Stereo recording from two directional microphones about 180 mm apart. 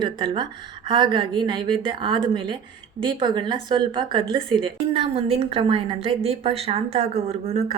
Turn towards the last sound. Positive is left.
turn(degrees=-35)  # may be behind; listen again after turning